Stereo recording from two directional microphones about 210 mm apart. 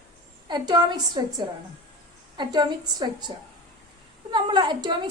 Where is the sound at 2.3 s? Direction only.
20° right (ahead or behind).